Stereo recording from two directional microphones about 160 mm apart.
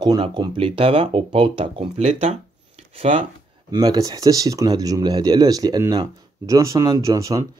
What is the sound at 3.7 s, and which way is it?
Speech, 25° right (ahead or behind).